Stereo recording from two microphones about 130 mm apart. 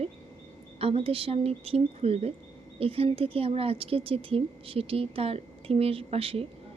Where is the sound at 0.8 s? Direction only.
50° right (ahead or behind).